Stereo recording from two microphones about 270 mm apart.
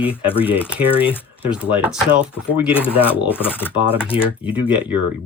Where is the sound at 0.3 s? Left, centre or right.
Centre.